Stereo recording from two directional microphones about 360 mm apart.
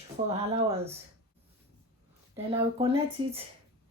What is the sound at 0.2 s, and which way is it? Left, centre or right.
Speech, centre.